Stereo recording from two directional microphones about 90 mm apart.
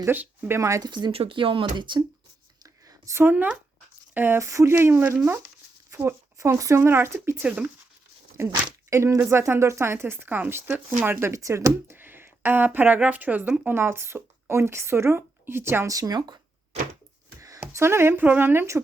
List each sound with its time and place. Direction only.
0.0 s speech: 25° right (ahead or behind)
0.8 s speech: 55° right (ahead or behind)
1.1 s speech: 85° right; by 2.0 s 60° right (ahead or behind)
2.6 s a sound: 30° right (ahead or behind)
4.1 s speech: 25° right (ahead or behind)
5.9 s speech: 30° right (ahead or behind)
8.4 s speech: 35° right (ahead or behind)
11.3 s speech: 35° right (ahead or behind)
15.9 s speech: 45° right (ahead or behind)
17.6 s speech: 30° right (ahead or behind)